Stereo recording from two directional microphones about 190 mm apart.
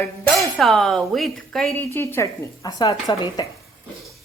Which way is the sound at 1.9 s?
15° left (ahead or behind).